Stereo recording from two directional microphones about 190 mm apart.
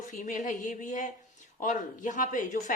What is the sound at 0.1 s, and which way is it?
A woman's voice, 40° left (ahead or behind).